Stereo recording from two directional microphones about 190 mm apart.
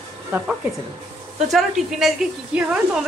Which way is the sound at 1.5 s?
Centre (ahead or behind).